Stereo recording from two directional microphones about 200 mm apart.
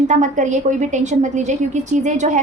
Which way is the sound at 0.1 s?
40° right (ahead or behind).